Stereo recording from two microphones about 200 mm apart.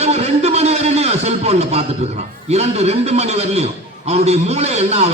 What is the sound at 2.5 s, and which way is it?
A man's voice, 30° right (ahead or behind).